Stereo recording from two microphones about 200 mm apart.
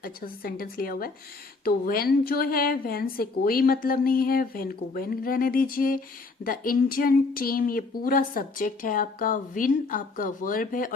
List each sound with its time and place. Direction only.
0.0 s speech: 45° left (ahead or behind)